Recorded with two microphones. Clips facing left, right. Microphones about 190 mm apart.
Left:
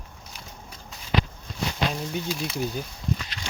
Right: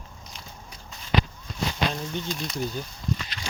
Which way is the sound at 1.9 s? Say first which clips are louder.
Left 2 dB; 5° left (ahead or behind).